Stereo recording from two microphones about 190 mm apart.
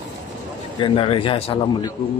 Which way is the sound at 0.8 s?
30° left (ahead or behind).